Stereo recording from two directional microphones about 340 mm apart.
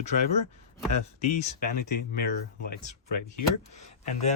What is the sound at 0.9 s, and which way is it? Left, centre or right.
Speech, centre.